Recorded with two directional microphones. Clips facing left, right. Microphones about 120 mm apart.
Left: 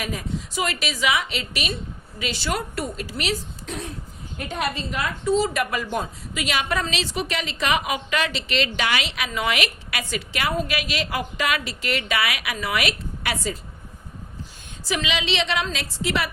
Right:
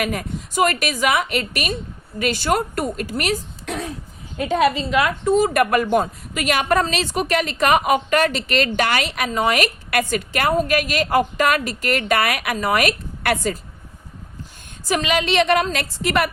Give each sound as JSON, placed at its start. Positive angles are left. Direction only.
{"t": 0.0, "sound": "a woman's voice", "side_deg": -60}
{"t": 3.7, "sound": "throat clearing", "side_deg": -90}
{"t": 4.8, "sound": "a woman's voice", "side_deg": -80}
{"t": 5.2, "sound": "a woman's voice", "side_deg": -50}
{"t": 14.8, "sound": "a woman's voice", "side_deg": -50}